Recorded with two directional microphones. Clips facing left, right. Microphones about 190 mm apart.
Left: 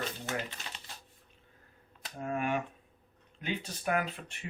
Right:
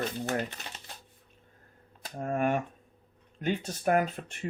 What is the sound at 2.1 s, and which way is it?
Speech, 45° right (ahead or behind).